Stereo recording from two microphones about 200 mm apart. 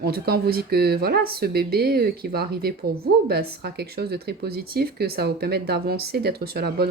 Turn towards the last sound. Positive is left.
turn(degrees=-55)  # may be behind; listen again after turning